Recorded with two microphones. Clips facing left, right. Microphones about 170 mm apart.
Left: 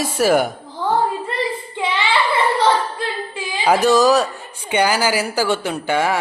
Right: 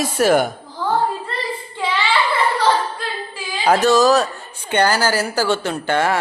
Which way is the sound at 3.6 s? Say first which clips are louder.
Even; 10° left (ahead or behind).